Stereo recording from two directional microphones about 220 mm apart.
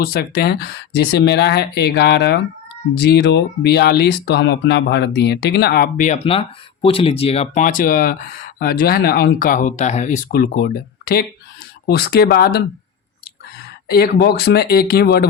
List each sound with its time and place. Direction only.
0.0 s speech: 45° left (ahead or behind)
13.9 s speech: 45° left (ahead or behind)